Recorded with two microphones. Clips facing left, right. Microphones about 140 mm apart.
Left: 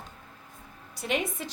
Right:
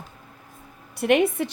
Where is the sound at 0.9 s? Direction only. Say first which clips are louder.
Right 11 dB; 60° right (ahead or behind).